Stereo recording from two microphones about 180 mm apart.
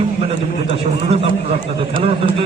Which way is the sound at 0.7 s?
30° right (ahead or behind).